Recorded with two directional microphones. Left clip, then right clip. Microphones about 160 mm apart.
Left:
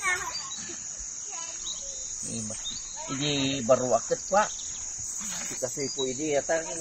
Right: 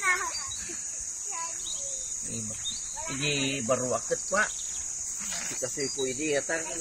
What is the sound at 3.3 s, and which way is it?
Speech, 30° right (ahead or behind).